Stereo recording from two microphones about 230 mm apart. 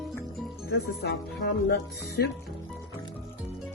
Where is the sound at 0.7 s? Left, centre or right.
Left.